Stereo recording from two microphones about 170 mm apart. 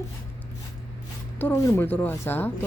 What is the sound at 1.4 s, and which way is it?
Female singing, 15° left (ahead or behind).